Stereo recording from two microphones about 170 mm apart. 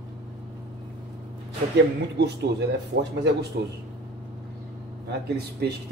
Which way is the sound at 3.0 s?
90° right.